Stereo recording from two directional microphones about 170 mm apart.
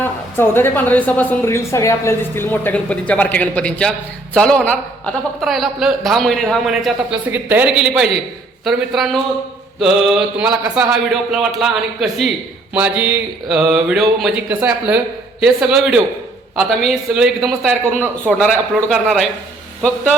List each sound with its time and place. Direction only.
0.0 s a woman's voice: 10° left (ahead or behind)